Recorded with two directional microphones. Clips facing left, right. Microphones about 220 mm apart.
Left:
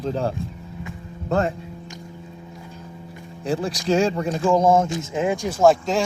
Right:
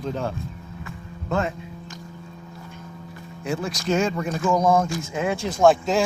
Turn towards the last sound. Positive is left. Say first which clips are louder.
# left 1 dB
turn(degrees=0)  # may be behind; listen again after turning